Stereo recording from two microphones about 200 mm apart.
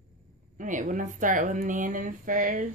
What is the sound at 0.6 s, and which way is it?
Speech, 40° right (ahead or behind).